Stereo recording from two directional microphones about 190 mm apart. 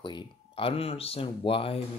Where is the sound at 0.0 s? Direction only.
25° left (ahead or behind).